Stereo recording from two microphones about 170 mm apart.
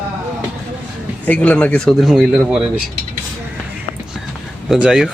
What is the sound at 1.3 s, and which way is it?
Speech, 10° left (ahead or behind).